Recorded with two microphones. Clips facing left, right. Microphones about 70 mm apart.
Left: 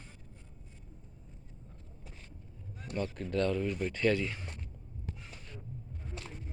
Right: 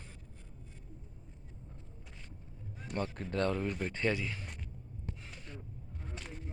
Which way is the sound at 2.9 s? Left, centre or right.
Right.